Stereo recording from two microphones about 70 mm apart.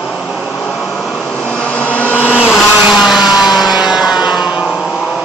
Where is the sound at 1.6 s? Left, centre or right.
Centre.